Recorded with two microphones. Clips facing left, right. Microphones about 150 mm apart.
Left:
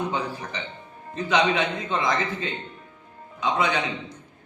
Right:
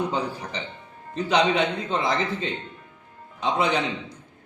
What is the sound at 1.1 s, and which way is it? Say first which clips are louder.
A man's voice: right 1 dB; 35° right (ahead or behind).